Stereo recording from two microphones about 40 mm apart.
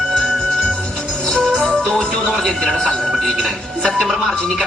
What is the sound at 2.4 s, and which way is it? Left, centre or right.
Speech, centre.